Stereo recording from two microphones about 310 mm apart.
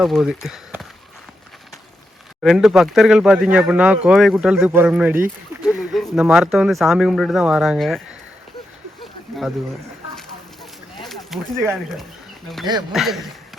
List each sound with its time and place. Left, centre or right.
0.0 s speech: centre
2.4 s speech: centre
11.0 s speech: centre